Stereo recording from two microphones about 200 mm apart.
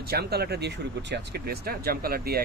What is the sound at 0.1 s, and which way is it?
Speech, 55° right (ahead or behind).